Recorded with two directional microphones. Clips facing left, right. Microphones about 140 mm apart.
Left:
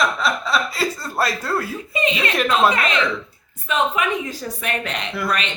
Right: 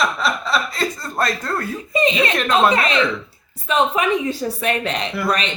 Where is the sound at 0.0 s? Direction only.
Centre (ahead or behind).